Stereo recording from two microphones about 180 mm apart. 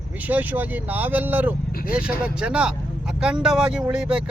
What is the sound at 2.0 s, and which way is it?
Speech, 5° right (ahead or behind).